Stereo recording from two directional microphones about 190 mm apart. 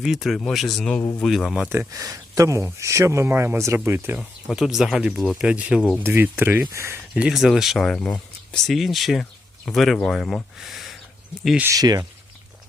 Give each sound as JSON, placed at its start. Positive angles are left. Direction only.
{"t": 0.0, "sound": "speech", "side_deg": 0}
{"t": 1.7, "sound": "speech", "side_deg": -15}
{"t": 11.7, "sound": "speech", "side_deg": -20}